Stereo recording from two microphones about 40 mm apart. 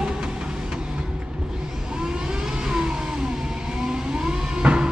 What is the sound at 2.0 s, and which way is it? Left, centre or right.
Vehicle, centre.